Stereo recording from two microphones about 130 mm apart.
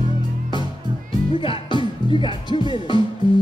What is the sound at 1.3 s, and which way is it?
Music, 40° left (ahead or behind).